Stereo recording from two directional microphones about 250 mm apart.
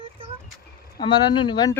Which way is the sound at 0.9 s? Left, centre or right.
Centre.